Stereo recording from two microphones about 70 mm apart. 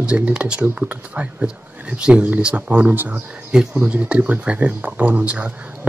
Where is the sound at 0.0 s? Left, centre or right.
Centre.